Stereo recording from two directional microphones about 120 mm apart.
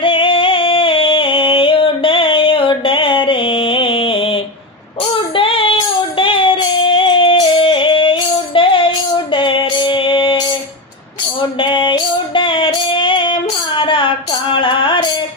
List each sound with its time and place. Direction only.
0.0 s music: 45° left (ahead or behind)
5.3 s child singing: 45° left (ahead or behind)
11.6 s music: 45° left (ahead or behind)